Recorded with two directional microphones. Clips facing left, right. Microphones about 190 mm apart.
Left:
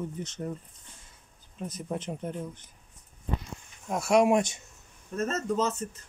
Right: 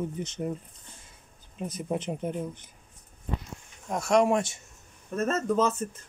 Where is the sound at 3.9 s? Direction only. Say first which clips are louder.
Left 1 dB; 5° left (ahead or behind).